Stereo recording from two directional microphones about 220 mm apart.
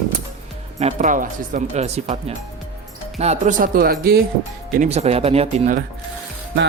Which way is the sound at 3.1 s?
30° right (ahead or behind).